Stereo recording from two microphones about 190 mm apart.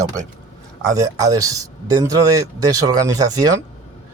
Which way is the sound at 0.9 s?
20° right (ahead or behind).